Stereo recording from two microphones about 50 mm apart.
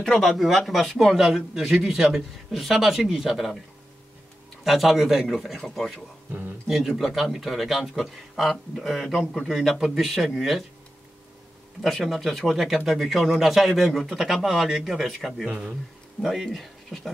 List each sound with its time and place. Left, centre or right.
0.0 s speech: centre
4.6 s speech: centre
7.0 s speech: centre
11.8 s speech: centre
15.4 s speech: centre
16.2 s speech: centre